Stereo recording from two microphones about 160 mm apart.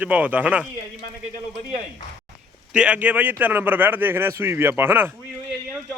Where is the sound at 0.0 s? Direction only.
10° right (ahead or behind).